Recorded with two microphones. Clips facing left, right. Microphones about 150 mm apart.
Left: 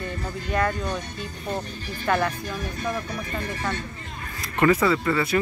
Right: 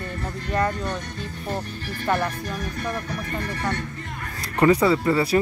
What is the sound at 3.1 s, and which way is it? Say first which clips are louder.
Speech: right 1 dB; 60° right (ahead or behind).